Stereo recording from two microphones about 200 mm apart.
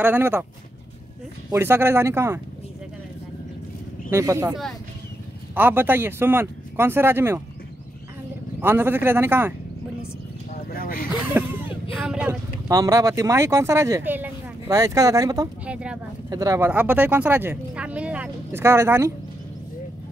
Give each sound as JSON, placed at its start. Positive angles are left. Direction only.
{"t": 0.0, "sound": "speech", "side_deg": -10}
{"t": 1.5, "sound": "speech", "side_deg": -10}
{"t": 4.1, "sound": "speech", "side_deg": -15}
{"t": 8.5, "sound": "speech", "side_deg": -10}
{"t": 10.8, "sound": "a sound", "side_deg": 45}
{"t": 11.3, "sound": "a sound", "side_deg": -10}
{"t": 12.6, "sound": "speech", "side_deg": -15}
{"t": 15.6, "sound": "speech", "side_deg": -5}
{"t": 16.3, "sound": "speech", "side_deg": -15}